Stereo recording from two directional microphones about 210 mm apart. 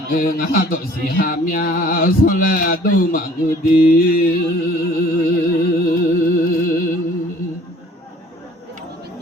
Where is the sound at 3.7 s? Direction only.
40° left (ahead or behind).